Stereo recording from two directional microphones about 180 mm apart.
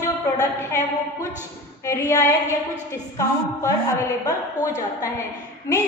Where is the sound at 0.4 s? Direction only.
15° left (ahead or behind).